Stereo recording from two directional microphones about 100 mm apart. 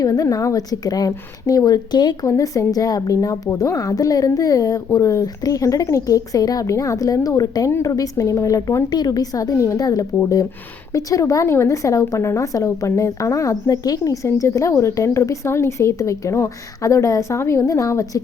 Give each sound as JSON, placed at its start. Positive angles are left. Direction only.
{"t": 0.0, "sound": "a woman's voice", "side_deg": 35}
{"t": 2.2, "sound": "a woman's voice", "side_deg": 35}